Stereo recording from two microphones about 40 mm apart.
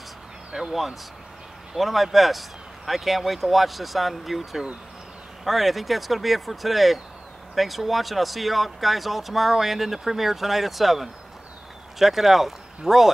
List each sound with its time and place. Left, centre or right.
0.5 s speech: centre
1.8 s speech: centre
5.4 s speech: centre